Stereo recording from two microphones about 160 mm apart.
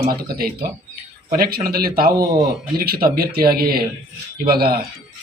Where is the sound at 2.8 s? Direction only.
70° right (ahead or behind).